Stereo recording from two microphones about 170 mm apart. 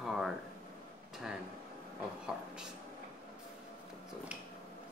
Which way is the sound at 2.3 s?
Centre (ahead or behind).